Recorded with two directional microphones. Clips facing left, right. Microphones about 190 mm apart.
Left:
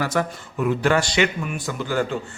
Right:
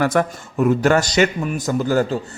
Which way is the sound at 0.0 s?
55° right (ahead or behind).